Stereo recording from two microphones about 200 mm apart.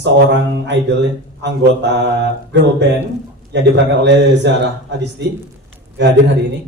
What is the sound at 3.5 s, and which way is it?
A man's voice, 60° right (ahead or behind).